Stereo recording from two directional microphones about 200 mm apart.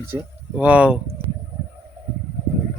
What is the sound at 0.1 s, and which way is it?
Speech, 15° right (ahead or behind).